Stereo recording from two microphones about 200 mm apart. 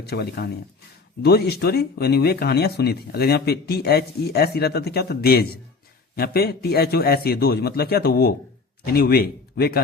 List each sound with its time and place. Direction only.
0.0 s speech: 55° left (ahead or behind)